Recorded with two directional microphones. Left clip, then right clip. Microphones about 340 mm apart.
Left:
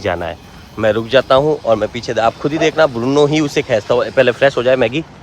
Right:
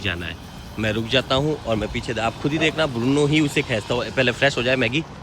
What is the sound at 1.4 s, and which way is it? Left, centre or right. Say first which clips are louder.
Speech: left 10 dB; centre.